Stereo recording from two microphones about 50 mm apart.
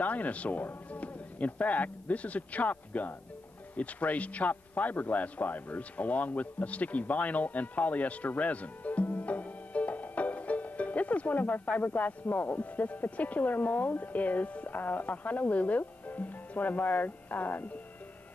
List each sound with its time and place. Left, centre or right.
0.0 s a man's voice: left